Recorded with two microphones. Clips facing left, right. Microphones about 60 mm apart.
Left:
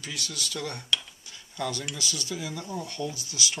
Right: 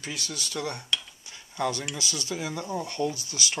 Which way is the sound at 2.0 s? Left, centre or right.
Right.